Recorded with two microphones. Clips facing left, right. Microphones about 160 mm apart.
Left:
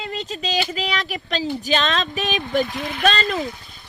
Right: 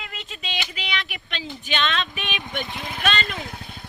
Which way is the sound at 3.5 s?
60° right (ahead or behind).